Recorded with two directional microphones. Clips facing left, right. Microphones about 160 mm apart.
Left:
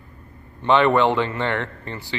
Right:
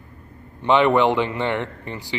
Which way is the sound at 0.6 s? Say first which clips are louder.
Even; 15° right (ahead or behind).